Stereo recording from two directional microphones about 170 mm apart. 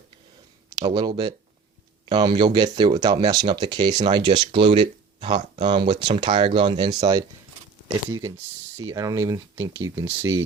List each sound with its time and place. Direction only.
0.8 s speech: 25° right (ahead or behind)
8.9 s speech: 20° right (ahead or behind)